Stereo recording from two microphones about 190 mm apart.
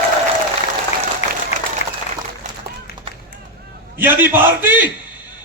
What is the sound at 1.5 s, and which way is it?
Applause, 35° left (ahead or behind).